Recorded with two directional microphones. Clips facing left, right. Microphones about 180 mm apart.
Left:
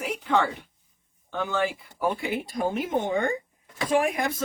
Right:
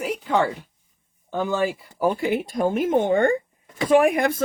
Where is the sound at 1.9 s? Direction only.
45° right (ahead or behind).